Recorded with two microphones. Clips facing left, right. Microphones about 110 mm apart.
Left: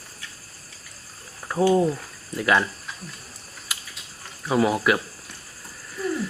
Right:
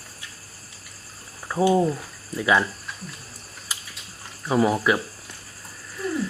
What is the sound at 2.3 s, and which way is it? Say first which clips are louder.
Speech: even; 5° right (ahead or behind).